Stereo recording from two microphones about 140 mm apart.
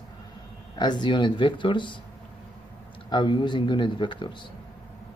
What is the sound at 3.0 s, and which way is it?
Speech, 35° left (ahead or behind).